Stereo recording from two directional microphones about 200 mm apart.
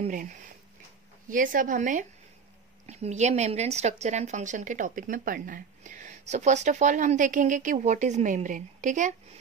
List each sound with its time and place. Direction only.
0.0 s a woman's voice: 40° right (ahead or behind)